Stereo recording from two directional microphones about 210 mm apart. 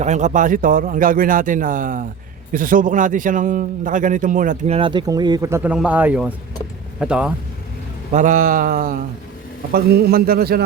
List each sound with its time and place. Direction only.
0.0 s a man's voice: 35° right (ahead or behind); by 7.3 s 5° right (ahead or behind)
8.1 s a man's voice: 40° right (ahead or behind)